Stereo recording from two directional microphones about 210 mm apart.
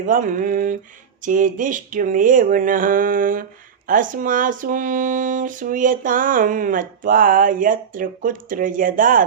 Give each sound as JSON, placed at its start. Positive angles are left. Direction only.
{"t": 0.0, "sound": "speech", "side_deg": -40}